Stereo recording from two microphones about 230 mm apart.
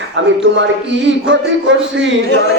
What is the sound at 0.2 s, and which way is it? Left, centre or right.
A man's voice, right.